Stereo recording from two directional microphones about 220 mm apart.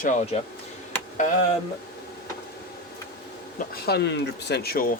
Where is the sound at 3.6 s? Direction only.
45° left (ahead or behind).